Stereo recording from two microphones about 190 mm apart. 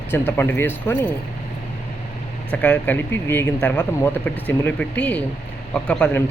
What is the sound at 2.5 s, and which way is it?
Speech, 5° left (ahead or behind).